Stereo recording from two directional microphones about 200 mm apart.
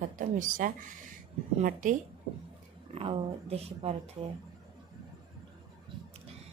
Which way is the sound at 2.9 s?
30° right (ahead or behind).